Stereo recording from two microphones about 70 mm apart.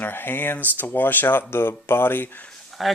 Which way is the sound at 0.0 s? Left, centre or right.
Left.